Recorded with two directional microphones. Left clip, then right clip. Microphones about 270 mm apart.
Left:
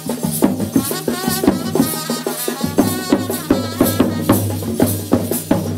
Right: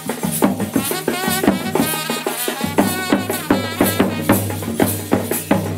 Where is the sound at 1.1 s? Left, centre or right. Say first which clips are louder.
Right 1 dB; right.